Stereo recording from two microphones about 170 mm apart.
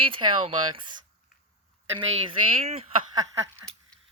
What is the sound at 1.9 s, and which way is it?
Speech, 30° right (ahead or behind).